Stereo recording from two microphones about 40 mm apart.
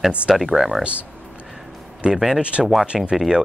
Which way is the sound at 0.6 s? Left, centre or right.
Centre.